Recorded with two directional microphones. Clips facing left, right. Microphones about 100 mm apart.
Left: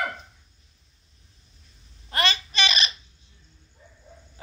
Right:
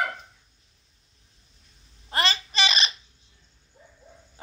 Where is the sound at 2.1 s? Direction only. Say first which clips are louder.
Even; 25° right (ahead or behind).